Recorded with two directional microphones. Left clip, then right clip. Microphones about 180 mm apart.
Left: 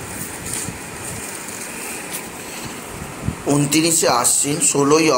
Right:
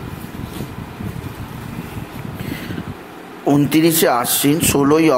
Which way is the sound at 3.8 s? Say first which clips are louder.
Right 1 dB; 35° right (ahead or behind).